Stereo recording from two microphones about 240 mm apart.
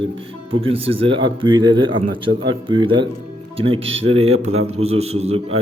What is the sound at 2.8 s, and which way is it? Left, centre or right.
Speech, centre.